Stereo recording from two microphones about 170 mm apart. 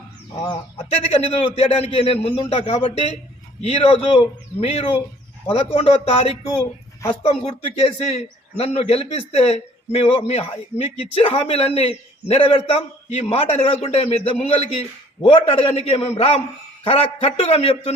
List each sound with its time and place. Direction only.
0.4 s a man's voice: 35° left (ahead or behind)